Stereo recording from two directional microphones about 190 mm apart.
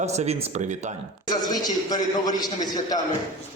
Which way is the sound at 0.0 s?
35° right (ahead or behind).